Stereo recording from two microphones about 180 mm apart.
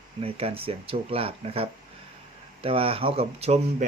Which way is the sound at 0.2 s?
30° right (ahead or behind).